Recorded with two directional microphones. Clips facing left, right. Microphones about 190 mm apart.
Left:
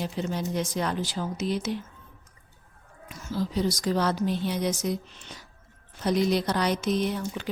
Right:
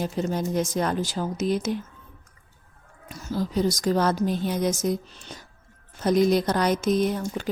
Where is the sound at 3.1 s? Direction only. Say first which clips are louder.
Right 2 dB; 40° right (ahead or behind).